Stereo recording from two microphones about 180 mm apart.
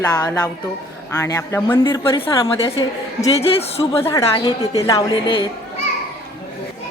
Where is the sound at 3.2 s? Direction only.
35° left (ahead or behind).